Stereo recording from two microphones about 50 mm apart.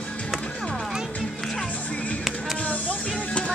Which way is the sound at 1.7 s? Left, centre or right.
Left.